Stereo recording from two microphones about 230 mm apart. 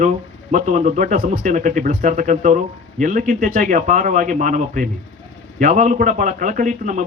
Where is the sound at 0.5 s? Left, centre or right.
Right.